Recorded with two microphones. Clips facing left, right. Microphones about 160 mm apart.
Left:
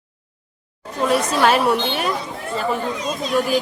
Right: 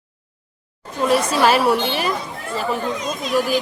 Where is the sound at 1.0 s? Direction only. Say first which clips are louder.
Right 1 dB; centre (ahead or behind).